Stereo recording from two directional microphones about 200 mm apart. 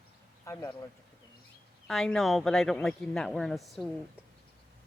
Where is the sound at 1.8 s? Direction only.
Centre (ahead or behind).